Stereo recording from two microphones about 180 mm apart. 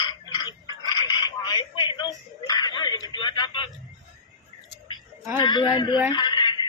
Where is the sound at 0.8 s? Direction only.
20° left (ahead or behind).